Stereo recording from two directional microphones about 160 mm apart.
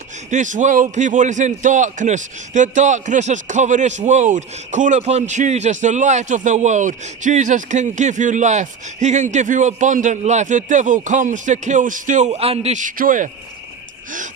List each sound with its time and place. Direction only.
0.3 s a man's voice: 50° right (ahead or behind)